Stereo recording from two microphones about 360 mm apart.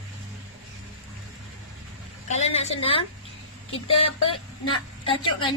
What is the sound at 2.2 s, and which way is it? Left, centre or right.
Speech, centre.